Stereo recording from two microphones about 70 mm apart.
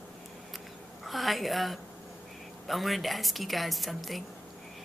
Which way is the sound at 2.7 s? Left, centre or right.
Centre.